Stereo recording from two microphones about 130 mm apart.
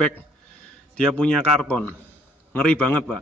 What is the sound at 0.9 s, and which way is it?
Speech, 5° left (ahead or behind).